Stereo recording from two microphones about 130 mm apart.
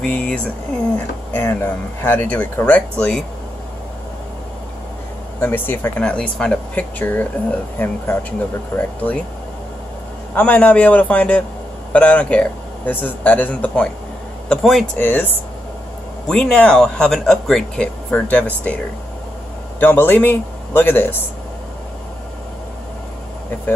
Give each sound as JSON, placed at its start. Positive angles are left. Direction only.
{"t": 0.0, "sound": "speech", "side_deg": 10}
{"t": 5.4, "sound": "speech", "side_deg": 15}
{"t": 10.3, "sound": "speech", "side_deg": 10}
{"t": 15.0, "sound": "speech", "side_deg": 15}
{"t": 19.8, "sound": "speech", "side_deg": 15}